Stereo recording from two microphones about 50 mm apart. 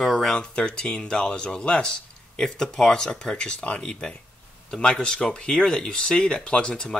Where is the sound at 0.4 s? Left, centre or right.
Centre.